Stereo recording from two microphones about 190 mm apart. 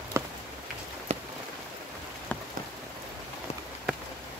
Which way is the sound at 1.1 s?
35° right (ahead or behind).